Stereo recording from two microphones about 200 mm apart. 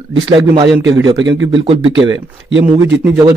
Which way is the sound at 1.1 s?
65° right (ahead or behind).